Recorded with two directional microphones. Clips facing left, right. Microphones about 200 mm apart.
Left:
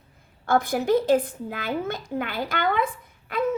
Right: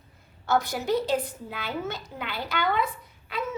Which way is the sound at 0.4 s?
55° left (ahead or behind).